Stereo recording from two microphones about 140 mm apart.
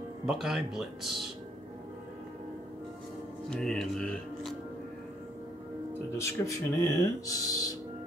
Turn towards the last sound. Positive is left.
turn(degrees=25)  # may be behind; listen again after turning